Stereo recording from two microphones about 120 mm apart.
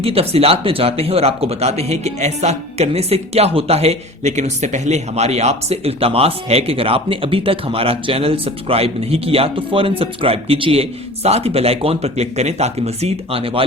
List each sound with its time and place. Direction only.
0.0 s speech: 55° right (ahead or behind)